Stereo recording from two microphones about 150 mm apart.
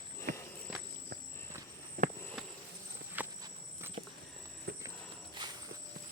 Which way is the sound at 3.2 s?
10° right (ahead or behind).